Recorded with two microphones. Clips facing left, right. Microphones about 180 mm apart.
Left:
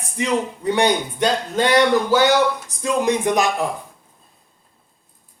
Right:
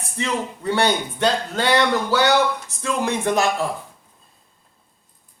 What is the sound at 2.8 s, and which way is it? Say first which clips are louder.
Speech: left 3 dB; 15° left (ahead or behind).